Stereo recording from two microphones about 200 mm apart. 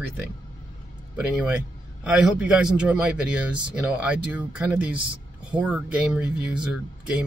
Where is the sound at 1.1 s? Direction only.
5° right (ahead or behind).